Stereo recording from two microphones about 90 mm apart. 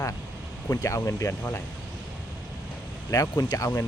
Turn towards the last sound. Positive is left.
turn(degrees=40)  # may be behind; listen again after turning